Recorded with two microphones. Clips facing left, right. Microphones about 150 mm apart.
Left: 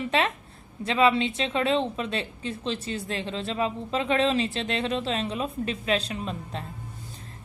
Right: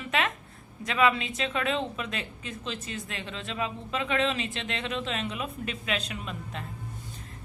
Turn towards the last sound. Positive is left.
turn(degrees=35)  # may be behind; listen again after turning